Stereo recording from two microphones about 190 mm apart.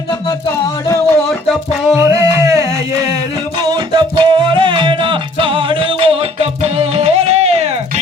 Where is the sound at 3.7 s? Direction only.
25° right (ahead or behind).